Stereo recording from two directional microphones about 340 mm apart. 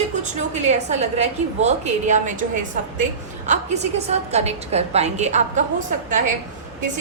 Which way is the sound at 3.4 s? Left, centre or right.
Centre.